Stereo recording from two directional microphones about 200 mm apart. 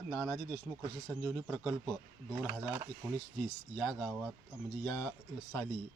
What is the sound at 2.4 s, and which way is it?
Speech, 10° right (ahead or behind).